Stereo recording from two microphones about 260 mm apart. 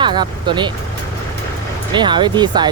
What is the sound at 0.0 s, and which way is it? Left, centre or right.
Speech, centre.